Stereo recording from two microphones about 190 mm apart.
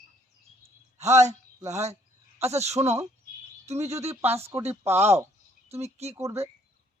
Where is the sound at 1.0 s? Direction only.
35° right (ahead or behind).